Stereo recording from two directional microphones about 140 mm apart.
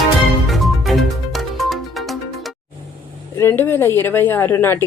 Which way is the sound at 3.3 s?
15° left (ahead or behind).